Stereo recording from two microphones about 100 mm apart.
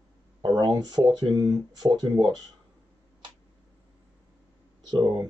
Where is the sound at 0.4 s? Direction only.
45° right (ahead or behind).